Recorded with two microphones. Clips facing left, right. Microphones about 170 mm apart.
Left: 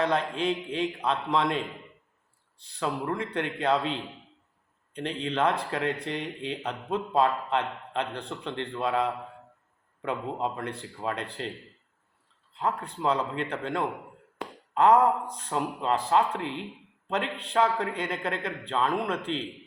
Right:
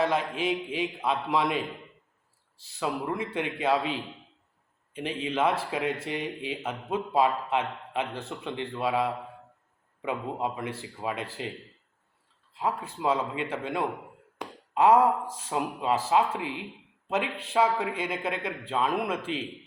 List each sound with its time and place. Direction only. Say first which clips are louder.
0.0 s speech: even; 5° right (ahead or behind)
12.5 s speech: even; 5° right (ahead or behind)